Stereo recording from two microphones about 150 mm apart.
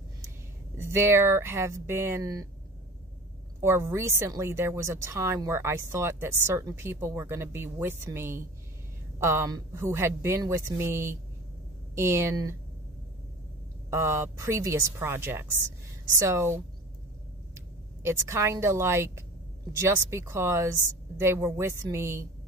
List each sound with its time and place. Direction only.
0.7 s speech: 15° right (ahead or behind)
3.6 s speech: 15° right (ahead or behind)
13.8 s speech: 20° right (ahead or behind)
18.0 s speech: 15° right (ahead or behind)